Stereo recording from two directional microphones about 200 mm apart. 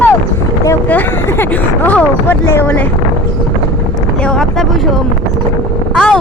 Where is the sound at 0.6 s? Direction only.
10° left (ahead or behind).